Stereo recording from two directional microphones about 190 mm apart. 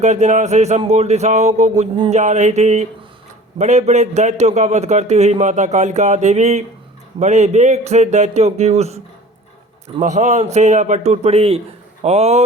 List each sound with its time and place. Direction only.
0.0 s a man's voice: 40° right (ahead or behind)
10.0 s a man's voice: 40° right (ahead or behind)